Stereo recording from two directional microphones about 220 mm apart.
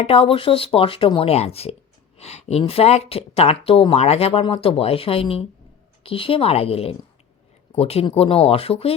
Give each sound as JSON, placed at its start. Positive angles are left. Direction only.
{"t": 0.0, "sound": "a woman's voice", "side_deg": 25}